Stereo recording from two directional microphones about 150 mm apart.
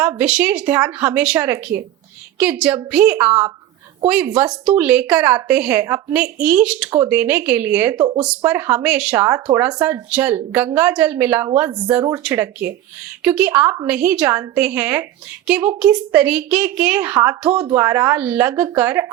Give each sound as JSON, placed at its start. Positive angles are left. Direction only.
{"t": 0.0, "sound": "a woman's voice", "side_deg": -10}
{"t": 8.0, "sound": "speech", "side_deg": -30}
{"t": 8.3, "sound": "a woman's voice", "side_deg": -15}